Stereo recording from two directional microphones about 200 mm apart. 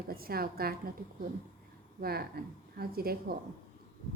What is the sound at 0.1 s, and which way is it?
Speech, 50° right (ahead or behind).